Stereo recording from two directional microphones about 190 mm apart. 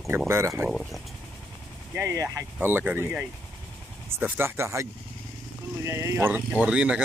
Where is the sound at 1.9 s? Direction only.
15° right (ahead or behind).